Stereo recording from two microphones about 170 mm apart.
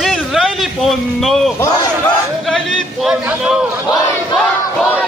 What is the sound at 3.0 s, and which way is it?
Speech, 5° right (ahead or behind).